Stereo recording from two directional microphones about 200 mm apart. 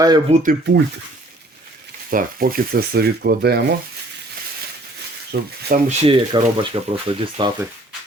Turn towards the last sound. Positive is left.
turn(degrees=-20)  # may be behind; listen again after turning